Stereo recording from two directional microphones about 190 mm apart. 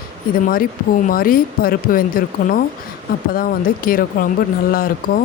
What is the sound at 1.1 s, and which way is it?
Speech, 50° left (ahead or behind).